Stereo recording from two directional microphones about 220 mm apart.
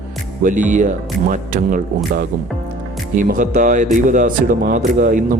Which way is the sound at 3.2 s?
35° right (ahead or behind).